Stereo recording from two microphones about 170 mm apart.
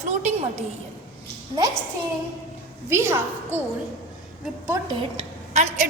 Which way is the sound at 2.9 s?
15° right (ahead or behind).